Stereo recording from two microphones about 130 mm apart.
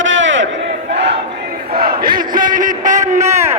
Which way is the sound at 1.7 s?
90° right.